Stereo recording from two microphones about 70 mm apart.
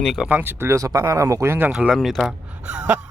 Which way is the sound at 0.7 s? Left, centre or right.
Right.